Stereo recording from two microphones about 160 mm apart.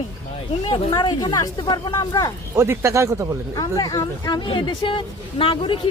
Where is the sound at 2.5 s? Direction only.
15° right (ahead or behind).